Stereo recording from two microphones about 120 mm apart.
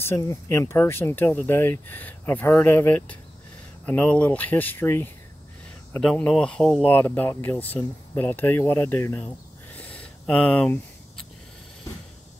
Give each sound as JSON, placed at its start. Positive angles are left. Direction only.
{"t": 0.0, "sound": "speech", "side_deg": 25}
{"t": 5.9, "sound": "speech", "side_deg": 5}
{"t": 6.9, "sound": "speech", "side_deg": 15}
{"t": 9.8, "sound": "a sound", "side_deg": 10}